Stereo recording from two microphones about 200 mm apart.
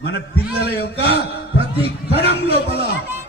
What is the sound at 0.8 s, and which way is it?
Speech, 55° left (ahead or behind).